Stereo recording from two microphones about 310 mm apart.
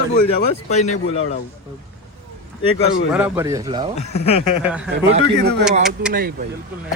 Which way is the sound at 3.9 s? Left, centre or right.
Left.